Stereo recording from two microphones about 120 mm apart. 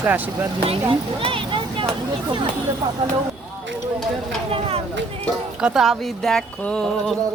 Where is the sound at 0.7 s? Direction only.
50° right (ahead or behind).